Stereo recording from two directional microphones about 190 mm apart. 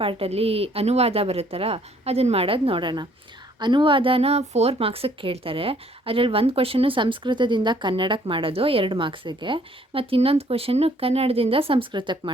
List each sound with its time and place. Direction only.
0.0 s a woman's voice: 30° right (ahead or behind)